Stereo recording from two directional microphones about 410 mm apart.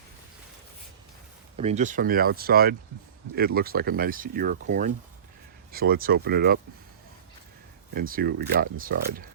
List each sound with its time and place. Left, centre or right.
1.5 s speech: centre
7.9 s speech: right